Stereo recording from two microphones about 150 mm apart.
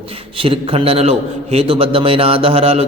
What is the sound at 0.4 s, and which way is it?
A man's voice, 35° right (ahead or behind).